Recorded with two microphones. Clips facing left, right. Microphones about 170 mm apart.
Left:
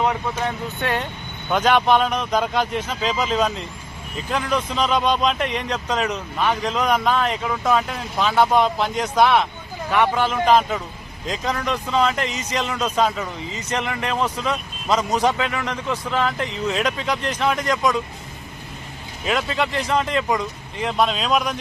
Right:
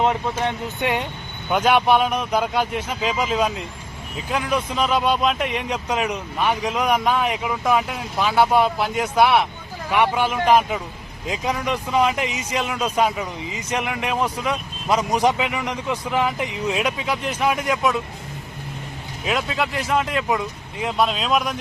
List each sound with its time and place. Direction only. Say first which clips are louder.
0.0 s a man's voice: right 1 dB; 25° right (ahead or behind); by 18.0 s 10° right (ahead or behind)
19.2 s speech: left 1 dB; centre (ahead or behind)